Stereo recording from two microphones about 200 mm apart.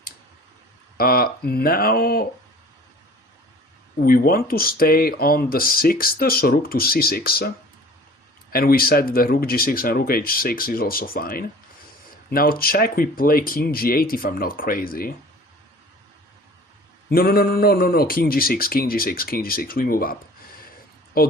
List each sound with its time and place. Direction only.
0.9 s speech: 50° left (ahead or behind)
4.0 s speech: 45° left (ahead or behind)
17.1 s speech: 50° left (ahead or behind)
21.2 s speech: 45° left (ahead or behind)